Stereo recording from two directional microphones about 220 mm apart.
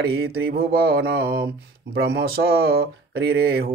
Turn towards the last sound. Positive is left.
turn(degrees=-45)  # may be behind; listen again after turning